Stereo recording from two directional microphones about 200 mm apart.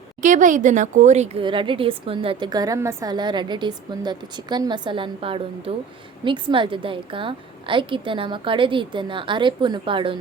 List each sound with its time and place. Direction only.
0.2 s speech: 40° right (ahead or behind)